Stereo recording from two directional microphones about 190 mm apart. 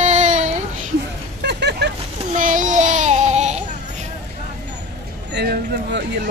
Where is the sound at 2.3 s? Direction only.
45° right (ahead or behind).